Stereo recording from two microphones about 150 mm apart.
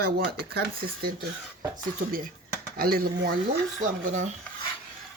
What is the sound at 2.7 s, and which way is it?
Speech, 85° right.